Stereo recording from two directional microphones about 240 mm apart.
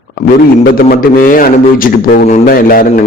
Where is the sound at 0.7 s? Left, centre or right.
Left.